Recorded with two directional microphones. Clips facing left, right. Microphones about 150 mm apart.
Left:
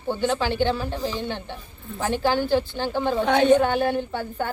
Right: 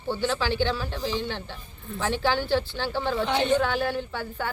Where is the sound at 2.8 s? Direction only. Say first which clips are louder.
Left 4 dB; 15° left (ahead or behind).